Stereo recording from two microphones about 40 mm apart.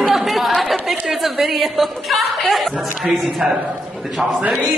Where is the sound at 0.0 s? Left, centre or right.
Centre.